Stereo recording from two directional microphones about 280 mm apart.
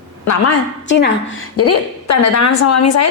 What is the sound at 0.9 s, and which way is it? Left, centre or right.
Speech, left.